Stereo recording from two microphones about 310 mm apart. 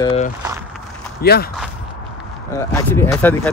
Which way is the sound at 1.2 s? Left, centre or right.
Left.